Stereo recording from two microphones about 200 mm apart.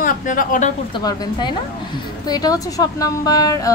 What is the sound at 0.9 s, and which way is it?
A woman's voice, 20° left (ahead or behind).